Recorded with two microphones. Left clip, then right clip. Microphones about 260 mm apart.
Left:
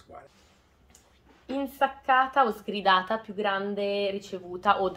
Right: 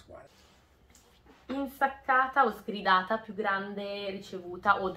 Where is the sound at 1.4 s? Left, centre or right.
Left.